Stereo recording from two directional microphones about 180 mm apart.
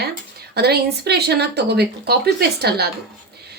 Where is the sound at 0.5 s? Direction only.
65° right (ahead or behind).